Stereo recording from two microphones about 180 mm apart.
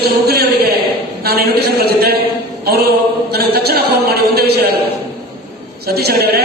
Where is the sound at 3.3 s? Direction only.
60° right (ahead or behind).